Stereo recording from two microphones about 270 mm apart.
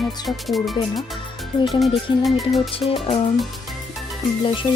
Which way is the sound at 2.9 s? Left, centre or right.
Left.